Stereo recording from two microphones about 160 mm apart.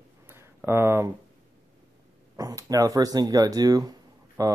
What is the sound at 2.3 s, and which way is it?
Speech, 20° right (ahead or behind).